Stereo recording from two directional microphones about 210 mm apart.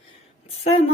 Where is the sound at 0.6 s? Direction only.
30° left (ahead or behind).